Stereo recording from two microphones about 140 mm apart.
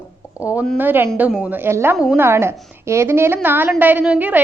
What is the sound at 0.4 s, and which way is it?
A woman's voice, 10° right (ahead or behind).